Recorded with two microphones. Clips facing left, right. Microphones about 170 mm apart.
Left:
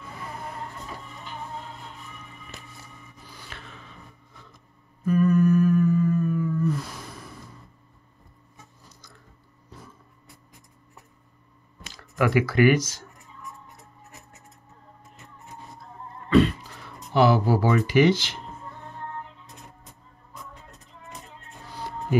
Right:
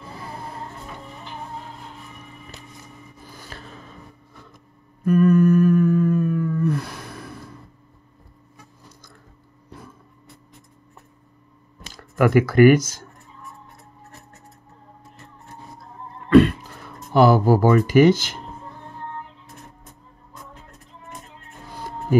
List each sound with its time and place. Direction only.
0.0 s music: 35° right (ahead or behind)
3.3 s a sound: 40° right (ahead or behind)
5.0 s humming: 65° right (ahead or behind)
10.2 s writing: 10° left (ahead or behind)
11.9 s speech: 50° right (ahead or behind)
16.3 s a sound: 60° right (ahead or behind)
17.1 s speech: 45° right (ahead or behind)